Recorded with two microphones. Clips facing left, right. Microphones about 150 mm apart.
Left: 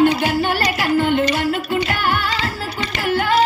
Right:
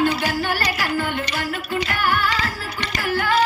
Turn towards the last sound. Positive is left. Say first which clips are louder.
# left 3 dB
turn(degrees=20)  # may be behind; listen again after turning